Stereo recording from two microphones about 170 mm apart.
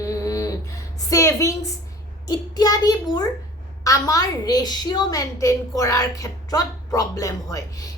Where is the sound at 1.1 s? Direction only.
20° left (ahead or behind).